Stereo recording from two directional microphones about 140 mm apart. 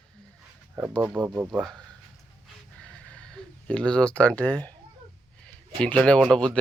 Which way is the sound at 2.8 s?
5° left (ahead or behind).